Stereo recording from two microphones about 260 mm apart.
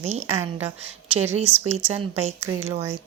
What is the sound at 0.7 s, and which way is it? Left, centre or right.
Speech, right.